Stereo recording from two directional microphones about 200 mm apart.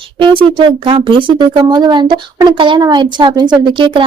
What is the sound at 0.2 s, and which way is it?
A woman's voice, 25° right (ahead or behind).